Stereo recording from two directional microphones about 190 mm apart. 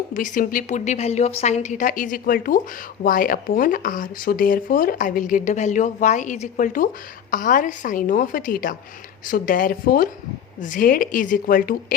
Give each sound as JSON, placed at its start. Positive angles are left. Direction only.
{"t": 0.1, "sound": "speech", "side_deg": 45}